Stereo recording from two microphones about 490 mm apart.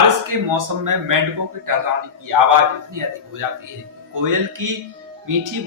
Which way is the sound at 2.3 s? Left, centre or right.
Right.